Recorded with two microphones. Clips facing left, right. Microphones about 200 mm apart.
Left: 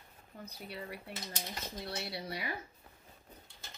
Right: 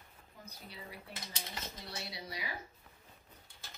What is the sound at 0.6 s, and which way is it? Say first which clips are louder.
Speech: left 6 dB; 65° left (ahead or behind).